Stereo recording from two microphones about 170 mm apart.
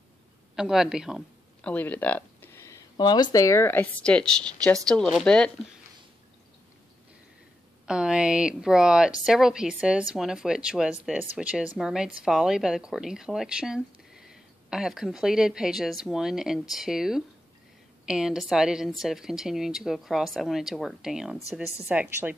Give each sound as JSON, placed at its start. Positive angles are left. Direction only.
{"t": 0.6, "sound": "speech", "side_deg": -5}
{"t": 7.8, "sound": "a woman's voice", "side_deg": -5}